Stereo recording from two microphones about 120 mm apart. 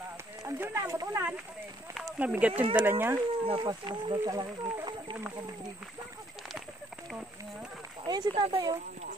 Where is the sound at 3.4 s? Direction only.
50° right (ahead or behind).